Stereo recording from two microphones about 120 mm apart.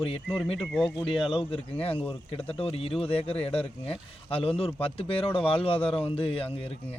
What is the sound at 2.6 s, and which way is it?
Speech, 55° left (ahead or behind).